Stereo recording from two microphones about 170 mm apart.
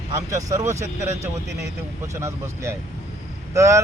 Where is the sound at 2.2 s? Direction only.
15° right (ahead or behind).